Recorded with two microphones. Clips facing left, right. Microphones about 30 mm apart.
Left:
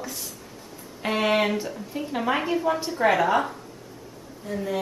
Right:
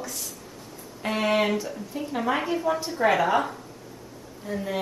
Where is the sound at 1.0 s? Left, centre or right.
Centre.